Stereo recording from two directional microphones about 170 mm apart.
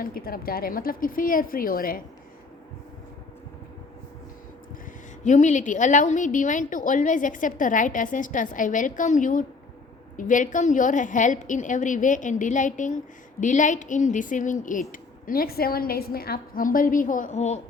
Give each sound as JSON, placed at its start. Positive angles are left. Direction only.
{"t": 0.0, "sound": "a woman's voice", "side_deg": 60}
{"t": 5.2, "sound": "a woman's voice", "side_deg": 45}
{"t": 15.3, "sound": "a woman's voice", "side_deg": 60}